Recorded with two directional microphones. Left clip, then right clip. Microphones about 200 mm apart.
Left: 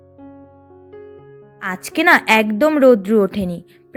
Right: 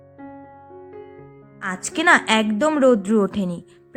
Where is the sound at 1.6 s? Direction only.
25° left (ahead or behind).